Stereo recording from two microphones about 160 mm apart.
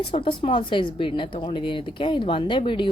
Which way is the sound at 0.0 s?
30° left (ahead or behind).